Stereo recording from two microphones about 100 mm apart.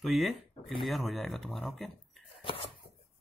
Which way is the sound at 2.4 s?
65° left (ahead or behind).